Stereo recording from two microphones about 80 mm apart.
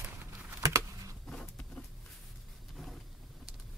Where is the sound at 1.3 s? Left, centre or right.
Centre.